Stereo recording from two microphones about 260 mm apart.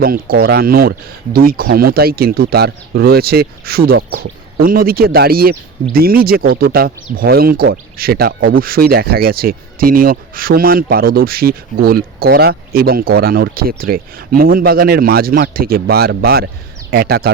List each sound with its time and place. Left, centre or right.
0.0 s speech: right